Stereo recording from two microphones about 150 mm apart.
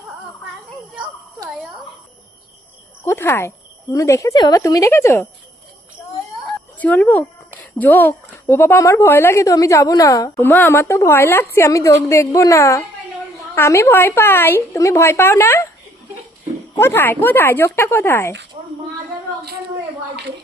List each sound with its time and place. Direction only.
3.0 s a woman's voice: 15° left (ahead or behind)
6.7 s a woman's voice: 10° left (ahead or behind)
16.7 s a woman's voice: 15° left (ahead or behind)